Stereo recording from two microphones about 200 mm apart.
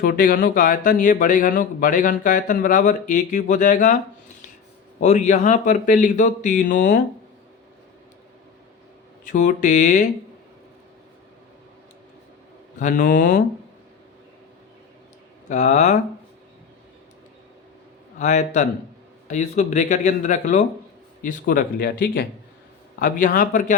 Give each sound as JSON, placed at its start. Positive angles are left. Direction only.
{"t": 0.0, "sound": "speech", "side_deg": 45}
{"t": 9.2, "sound": "speech", "side_deg": 40}
{"t": 12.8, "sound": "speech", "side_deg": 40}
{"t": 15.4, "sound": "speech", "side_deg": 35}
{"t": 18.2, "sound": "speech", "side_deg": 35}